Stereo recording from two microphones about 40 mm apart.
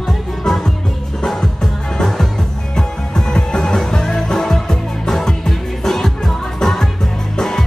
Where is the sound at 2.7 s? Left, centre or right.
Centre.